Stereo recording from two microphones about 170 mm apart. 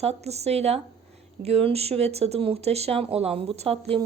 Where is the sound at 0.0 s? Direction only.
40° right (ahead or behind).